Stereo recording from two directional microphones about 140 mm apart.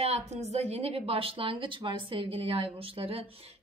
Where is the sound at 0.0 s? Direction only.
50° right (ahead or behind).